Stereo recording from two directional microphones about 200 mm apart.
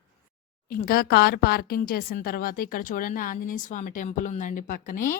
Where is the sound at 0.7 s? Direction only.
45° left (ahead or behind).